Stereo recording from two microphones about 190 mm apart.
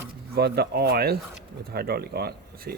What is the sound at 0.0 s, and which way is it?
Speech, 60° right (ahead or behind).